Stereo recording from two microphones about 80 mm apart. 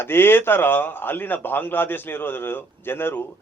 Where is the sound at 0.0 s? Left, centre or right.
Left.